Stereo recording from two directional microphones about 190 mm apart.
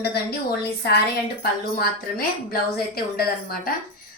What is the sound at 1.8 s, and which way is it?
A woman's voice, 50° left (ahead or behind).